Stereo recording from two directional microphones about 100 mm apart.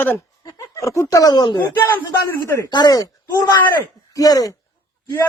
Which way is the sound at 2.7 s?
45° left (ahead or behind).